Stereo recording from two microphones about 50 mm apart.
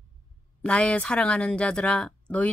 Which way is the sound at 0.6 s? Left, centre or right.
Left.